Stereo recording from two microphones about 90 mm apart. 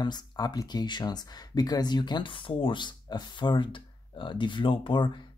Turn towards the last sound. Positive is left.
turn(degrees=60)  # may be behind; listen again after turning